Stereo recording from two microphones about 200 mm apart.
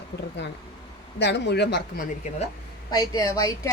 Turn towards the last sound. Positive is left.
turn(degrees=15)  # may be behind; listen again after turning